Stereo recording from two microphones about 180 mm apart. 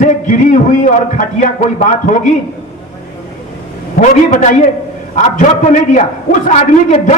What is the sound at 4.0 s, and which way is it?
A man's voice, 40° left (ahead or behind).